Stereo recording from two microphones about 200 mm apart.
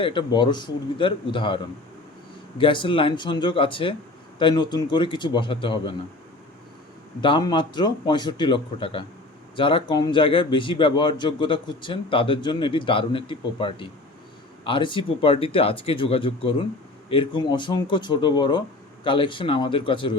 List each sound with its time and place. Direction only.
0.0 s speech: 25° left (ahead or behind)
7.2 s speech: 25° left (ahead or behind)